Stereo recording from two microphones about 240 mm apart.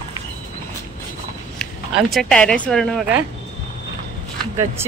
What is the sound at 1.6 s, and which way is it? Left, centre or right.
Speech, centre.